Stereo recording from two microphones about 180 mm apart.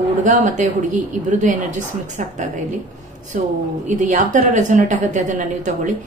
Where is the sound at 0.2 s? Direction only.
45° right (ahead or behind).